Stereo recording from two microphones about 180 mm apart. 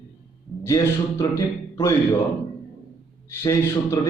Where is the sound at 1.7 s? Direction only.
15° left (ahead or behind).